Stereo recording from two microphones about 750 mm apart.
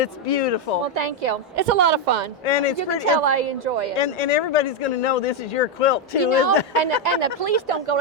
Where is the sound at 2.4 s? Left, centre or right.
Left.